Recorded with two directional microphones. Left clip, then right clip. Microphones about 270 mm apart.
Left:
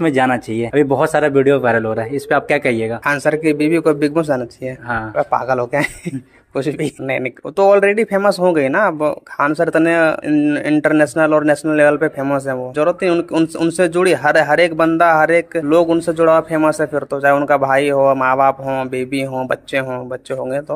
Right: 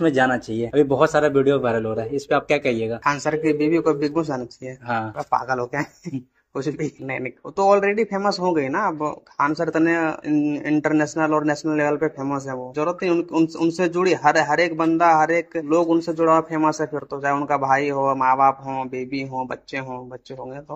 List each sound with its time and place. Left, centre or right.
0.0 s speech: left